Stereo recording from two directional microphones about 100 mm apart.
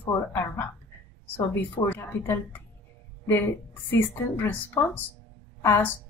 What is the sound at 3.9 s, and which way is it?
A woman's voice, 20° left (ahead or behind).